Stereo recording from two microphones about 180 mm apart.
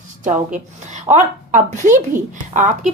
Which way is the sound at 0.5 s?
40° right (ahead or behind).